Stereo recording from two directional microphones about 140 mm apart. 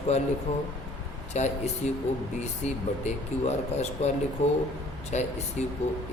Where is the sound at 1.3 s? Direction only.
55° left (ahead or behind).